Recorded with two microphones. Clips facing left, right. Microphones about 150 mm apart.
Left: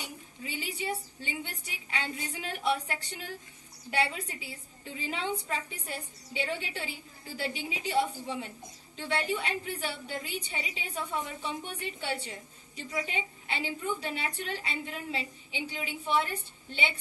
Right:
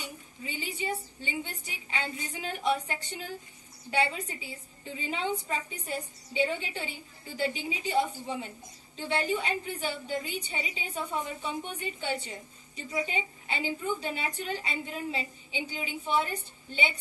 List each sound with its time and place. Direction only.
0.5 s a woman's voice: centre (ahead or behind)